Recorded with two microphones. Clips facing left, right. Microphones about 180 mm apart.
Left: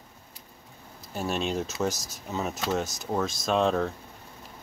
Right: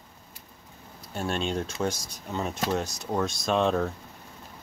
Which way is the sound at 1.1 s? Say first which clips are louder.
Even; 5° left (ahead or behind).